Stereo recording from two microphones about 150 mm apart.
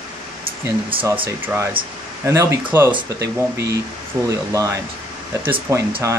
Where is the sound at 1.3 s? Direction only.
15° right (ahead or behind).